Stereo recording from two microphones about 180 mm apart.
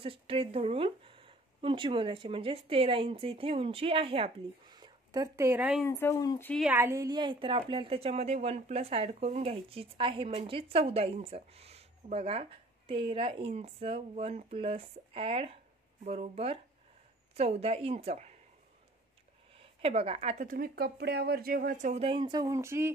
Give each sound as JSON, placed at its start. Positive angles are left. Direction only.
{"t": 0.0, "sound": "speech", "side_deg": -30}
{"t": 5.9, "sound": "speech", "side_deg": 15}
{"t": 6.5, "sound": "speech", "side_deg": -5}
{"t": 6.8, "sound": "a woman's voice", "side_deg": -15}
{"t": 19.5, "sound": "a woman's voice", "side_deg": -30}